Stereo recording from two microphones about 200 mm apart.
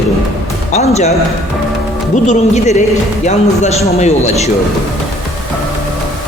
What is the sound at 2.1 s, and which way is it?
A man's voice, 35° left (ahead or behind).